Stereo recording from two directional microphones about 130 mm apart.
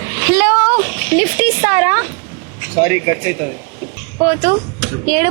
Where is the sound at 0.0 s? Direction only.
15° right (ahead or behind).